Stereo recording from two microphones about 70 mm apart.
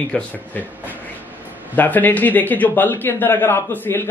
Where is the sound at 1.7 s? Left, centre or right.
Left.